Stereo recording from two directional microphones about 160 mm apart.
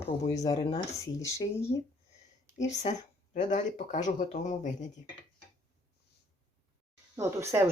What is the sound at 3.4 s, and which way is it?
Speech, 50° left (ahead or behind).